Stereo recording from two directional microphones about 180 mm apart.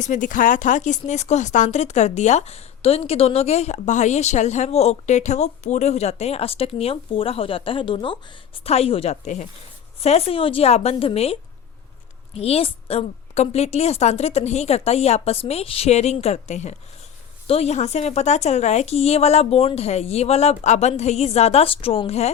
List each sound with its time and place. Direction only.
0.0 s speech: 45° left (ahead or behind)